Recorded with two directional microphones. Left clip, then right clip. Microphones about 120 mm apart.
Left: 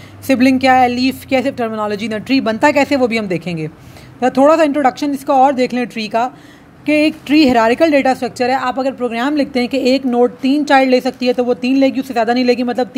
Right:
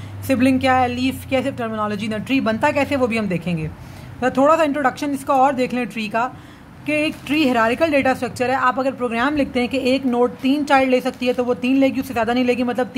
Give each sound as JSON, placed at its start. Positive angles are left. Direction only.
{"t": 0.3, "sound": "a woman's voice", "side_deg": 40}